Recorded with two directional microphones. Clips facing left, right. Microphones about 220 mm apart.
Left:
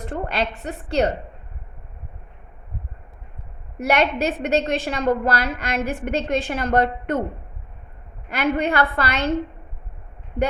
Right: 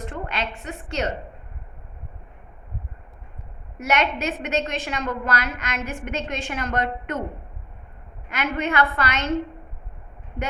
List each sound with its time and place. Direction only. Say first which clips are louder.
0.0 s a sound: left 5 dB; 35° left (ahead or behind)
0.9 s a woman's voice: left 7 dB; 35° left (ahead or behind)
3.8 s a woman's voice: left 4 dB; 35° left (ahead or behind)
8.3 s a woman's voice: left 4 dB; 35° left (ahead or behind)